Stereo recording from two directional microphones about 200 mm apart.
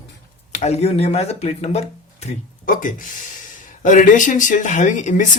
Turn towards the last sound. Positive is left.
turn(degrees=40)  # may be behind; listen again after turning